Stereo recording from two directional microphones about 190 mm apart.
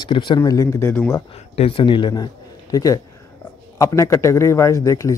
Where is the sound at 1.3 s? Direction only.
30° left (ahead or behind).